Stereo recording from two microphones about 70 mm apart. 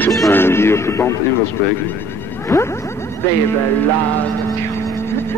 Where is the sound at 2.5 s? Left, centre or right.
Left.